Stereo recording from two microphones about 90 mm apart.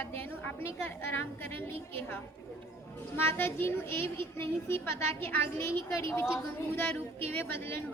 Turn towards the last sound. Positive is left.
turn(degrees=25)  # may be behind; listen again after turning